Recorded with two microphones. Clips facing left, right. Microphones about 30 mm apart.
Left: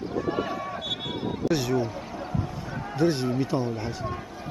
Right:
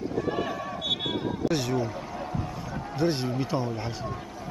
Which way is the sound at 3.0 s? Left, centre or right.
Centre.